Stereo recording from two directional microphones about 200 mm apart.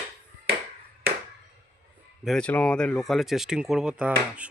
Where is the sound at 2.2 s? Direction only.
5° left (ahead or behind).